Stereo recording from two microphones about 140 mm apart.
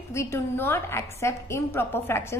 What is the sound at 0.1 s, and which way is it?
A woman's voice, 20° left (ahead or behind).